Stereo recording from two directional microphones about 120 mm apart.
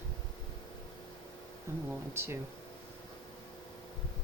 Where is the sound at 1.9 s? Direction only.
20° right (ahead or behind).